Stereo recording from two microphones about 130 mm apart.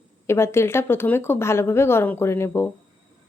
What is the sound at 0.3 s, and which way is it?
A woman's voice, 20° left (ahead or behind).